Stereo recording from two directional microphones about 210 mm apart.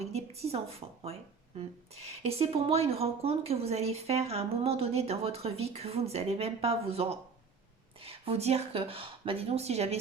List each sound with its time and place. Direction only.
0.0 s a woman's voice: 30° right (ahead or behind)